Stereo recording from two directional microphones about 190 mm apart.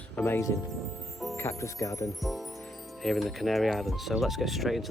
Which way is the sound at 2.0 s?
Centre (ahead or behind).